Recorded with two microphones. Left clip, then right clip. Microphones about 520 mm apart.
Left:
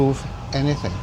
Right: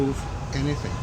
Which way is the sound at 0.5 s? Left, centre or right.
Left.